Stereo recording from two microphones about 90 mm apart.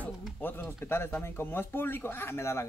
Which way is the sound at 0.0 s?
20° left (ahead or behind).